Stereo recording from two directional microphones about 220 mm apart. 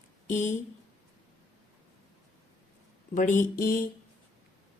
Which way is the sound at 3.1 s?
35° left (ahead or behind).